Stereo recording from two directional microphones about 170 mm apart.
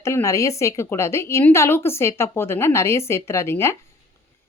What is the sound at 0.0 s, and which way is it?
Speech, 15° left (ahead or behind).